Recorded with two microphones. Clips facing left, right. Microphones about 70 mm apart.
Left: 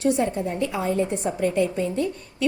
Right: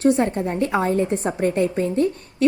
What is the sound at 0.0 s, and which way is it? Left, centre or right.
A woman's voice, right.